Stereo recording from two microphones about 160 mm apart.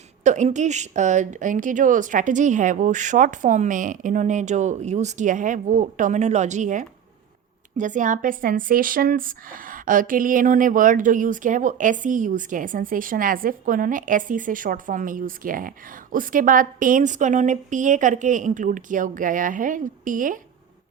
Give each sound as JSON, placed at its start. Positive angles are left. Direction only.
{"t": 0.3, "sound": "speech", "side_deg": -50}